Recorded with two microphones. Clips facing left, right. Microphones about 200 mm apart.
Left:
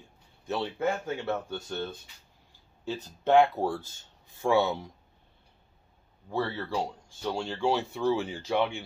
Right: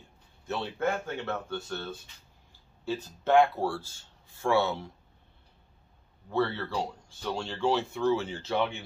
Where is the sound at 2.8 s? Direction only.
15° left (ahead or behind).